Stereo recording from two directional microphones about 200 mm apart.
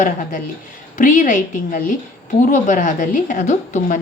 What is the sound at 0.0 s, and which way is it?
A woman's voice, 40° left (ahead or behind).